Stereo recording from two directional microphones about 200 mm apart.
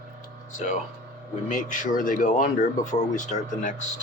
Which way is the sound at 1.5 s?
40° left (ahead or behind).